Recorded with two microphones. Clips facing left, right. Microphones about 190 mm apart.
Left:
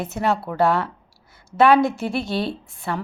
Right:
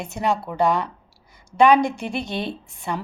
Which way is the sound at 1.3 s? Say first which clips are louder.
Even; 15° right (ahead or behind).